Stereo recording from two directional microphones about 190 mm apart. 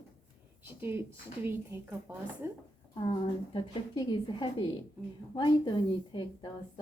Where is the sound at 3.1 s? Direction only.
25° left (ahead or behind).